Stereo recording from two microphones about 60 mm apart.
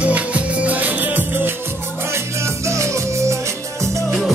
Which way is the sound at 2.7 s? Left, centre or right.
Right.